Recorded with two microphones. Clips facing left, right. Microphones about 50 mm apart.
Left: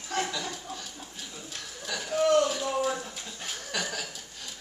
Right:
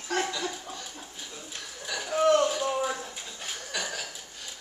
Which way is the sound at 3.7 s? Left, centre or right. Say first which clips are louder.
Left 1 dB; centre.